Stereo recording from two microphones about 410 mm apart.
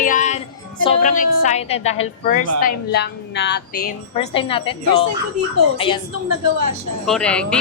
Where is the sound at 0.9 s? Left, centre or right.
Centre.